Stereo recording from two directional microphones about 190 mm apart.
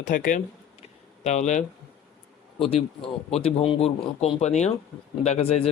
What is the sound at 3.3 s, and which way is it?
Speech, 35° left (ahead or behind).